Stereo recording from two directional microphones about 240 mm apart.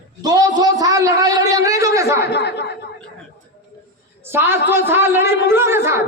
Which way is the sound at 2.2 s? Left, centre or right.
Left.